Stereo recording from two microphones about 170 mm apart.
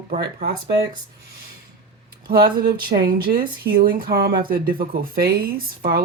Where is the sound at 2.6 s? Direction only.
60° right (ahead or behind).